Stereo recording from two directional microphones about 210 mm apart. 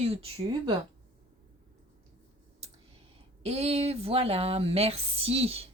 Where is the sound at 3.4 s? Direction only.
30° right (ahead or behind).